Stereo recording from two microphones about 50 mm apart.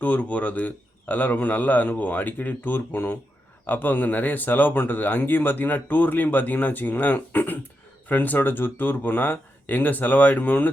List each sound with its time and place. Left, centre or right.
0.0 s speech: left